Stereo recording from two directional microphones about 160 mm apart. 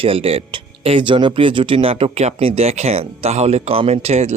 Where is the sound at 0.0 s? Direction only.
35° right (ahead or behind).